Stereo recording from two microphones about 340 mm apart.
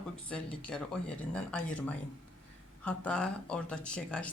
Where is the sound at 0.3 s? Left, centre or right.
Centre.